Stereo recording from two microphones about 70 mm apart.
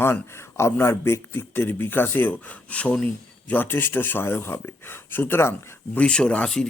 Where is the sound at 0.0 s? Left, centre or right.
Left; by 2.9 s centre.